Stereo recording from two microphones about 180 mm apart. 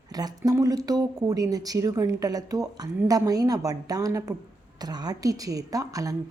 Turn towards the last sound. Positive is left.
turn(degrees=-20)  # may be behind; listen again after turning